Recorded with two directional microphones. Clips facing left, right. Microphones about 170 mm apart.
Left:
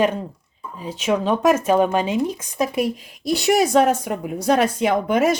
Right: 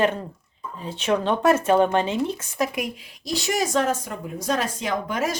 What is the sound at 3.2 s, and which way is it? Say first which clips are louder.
Speech: left 7 dB; 60° left (ahead or behind).